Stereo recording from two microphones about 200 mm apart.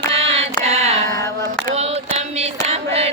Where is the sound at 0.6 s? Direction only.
35° right (ahead or behind).